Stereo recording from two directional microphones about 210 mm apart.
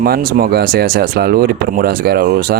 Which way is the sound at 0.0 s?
45° right (ahead or behind).